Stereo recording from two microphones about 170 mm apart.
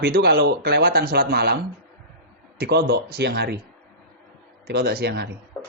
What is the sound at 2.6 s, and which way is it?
Speech, 70° right (ahead or behind).